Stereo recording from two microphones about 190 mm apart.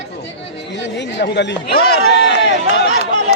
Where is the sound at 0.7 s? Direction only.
65° left (ahead or behind).